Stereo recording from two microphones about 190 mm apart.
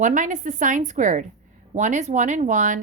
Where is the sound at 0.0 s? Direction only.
40° right (ahead or behind).